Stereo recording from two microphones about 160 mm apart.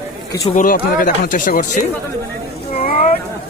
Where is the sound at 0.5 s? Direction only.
60° left (ahead or behind).